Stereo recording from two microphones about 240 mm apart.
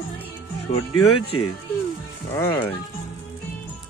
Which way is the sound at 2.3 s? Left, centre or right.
Centre.